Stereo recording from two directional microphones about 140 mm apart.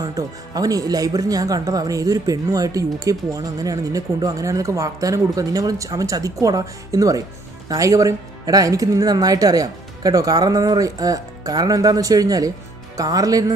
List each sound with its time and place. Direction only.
0.0 s speech: 25° right (ahead or behind)